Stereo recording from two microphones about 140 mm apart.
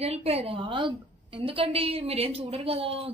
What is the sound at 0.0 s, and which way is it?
A woman's voice, 45° right (ahead or behind).